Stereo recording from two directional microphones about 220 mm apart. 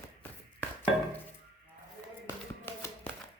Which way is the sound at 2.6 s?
10° left (ahead or behind).